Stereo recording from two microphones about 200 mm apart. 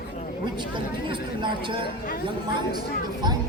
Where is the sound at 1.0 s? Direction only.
25° right (ahead or behind).